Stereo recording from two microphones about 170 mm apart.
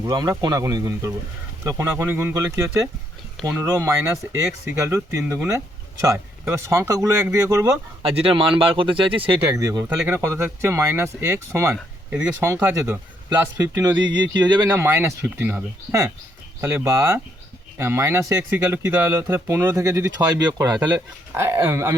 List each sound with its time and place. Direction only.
0.0 s speech: 20° right (ahead or behind)
8.1 s speech: 35° right (ahead or behind)
9.4 s speech: 15° right (ahead or behind)
14.7 s speech: 15° right (ahead or behind)